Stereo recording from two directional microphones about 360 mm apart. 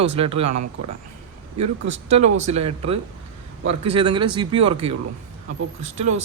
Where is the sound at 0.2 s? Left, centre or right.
Centre.